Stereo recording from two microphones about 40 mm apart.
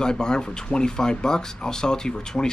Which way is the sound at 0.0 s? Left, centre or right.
Centre.